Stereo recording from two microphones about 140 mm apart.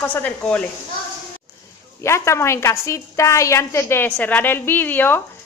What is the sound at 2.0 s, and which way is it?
A woman's voice, 20° left (ahead or behind).